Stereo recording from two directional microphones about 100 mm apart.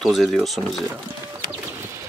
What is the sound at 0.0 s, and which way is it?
Speech, centre (ahead or behind).